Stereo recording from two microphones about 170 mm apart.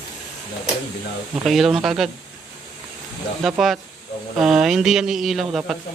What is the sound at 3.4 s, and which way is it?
Speech, centre (ahead or behind).